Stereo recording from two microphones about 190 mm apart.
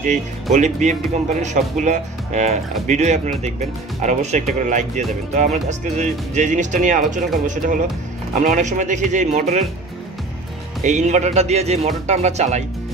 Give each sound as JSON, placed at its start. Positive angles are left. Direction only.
{"t": 0.0, "sound": "speech", "side_deg": -40}
{"t": 10.8, "sound": "speech", "side_deg": -40}